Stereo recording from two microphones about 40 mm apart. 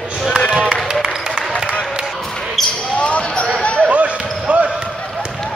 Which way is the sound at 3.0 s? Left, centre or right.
Left.